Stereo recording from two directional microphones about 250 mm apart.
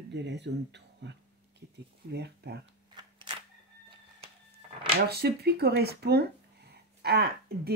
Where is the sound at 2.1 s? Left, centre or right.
Right.